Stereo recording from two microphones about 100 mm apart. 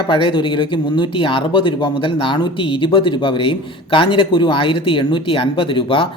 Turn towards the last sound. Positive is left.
turn(degrees=65)  # may be behind; listen again after turning